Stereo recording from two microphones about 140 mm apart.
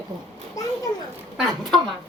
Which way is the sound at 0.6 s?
25° left (ahead or behind).